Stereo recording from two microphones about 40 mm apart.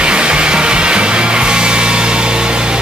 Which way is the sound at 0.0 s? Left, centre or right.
Right.